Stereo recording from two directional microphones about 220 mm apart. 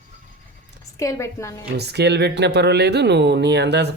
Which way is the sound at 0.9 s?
15° left (ahead or behind).